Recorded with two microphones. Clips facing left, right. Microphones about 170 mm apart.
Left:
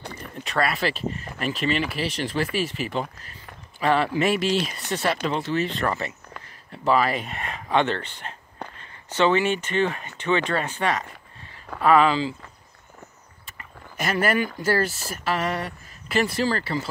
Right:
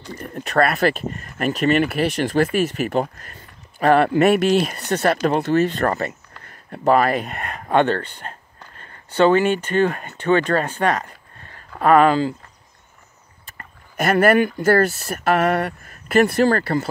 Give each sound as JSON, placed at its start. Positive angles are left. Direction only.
{"t": 0.1, "sound": "speech", "side_deg": -55}
{"t": 7.8, "sound": "speech", "side_deg": -40}
{"t": 13.9, "sound": "speech", "side_deg": -55}